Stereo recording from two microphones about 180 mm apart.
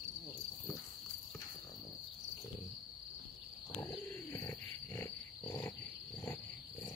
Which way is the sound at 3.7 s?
15° left (ahead or behind).